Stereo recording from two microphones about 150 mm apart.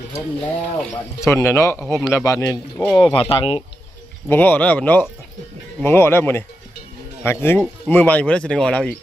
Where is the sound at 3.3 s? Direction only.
35° left (ahead or behind).